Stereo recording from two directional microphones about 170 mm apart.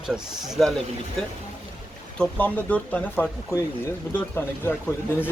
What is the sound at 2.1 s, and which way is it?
Speech, 5° left (ahead or behind).